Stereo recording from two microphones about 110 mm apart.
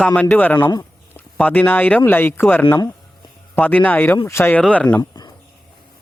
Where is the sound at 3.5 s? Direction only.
15° left (ahead or behind).